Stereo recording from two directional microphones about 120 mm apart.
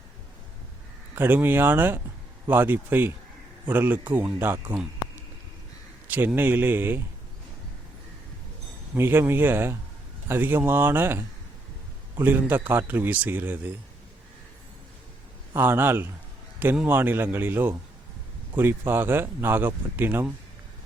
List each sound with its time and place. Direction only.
1.1 s speech: 20° right (ahead or behind)
6.1 s speech: 15° right (ahead or behind)
9.0 s speech: 15° right (ahead or behind)
15.5 s speech: 20° right (ahead or behind)